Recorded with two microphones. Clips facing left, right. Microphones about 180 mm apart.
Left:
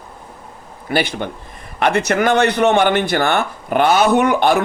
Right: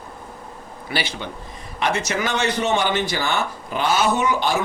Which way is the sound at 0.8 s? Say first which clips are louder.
Left 8 dB; 55° left (ahead or behind).